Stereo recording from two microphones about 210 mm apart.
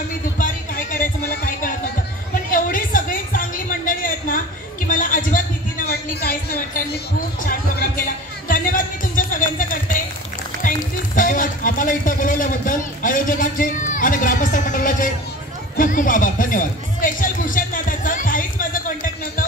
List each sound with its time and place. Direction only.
0.4 s music: 40° left (ahead or behind)
2.5 s a sound: 40° left (ahead or behind)
8.5 s music: 40° left (ahead or behind)
10.6 s speech: 40° left (ahead or behind)
15.7 s music: 40° left (ahead or behind)